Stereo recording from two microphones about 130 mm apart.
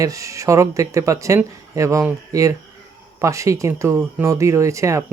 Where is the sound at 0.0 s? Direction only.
25° right (ahead or behind).